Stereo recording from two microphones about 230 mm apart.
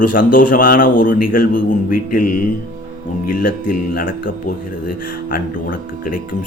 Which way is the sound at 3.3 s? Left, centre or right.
Left.